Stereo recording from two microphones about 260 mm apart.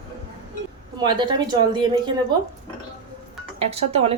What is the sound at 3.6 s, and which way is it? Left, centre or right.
Speech, right.